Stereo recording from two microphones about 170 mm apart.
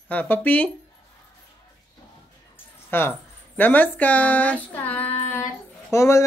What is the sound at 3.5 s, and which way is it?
Speech, 10° left (ahead or behind).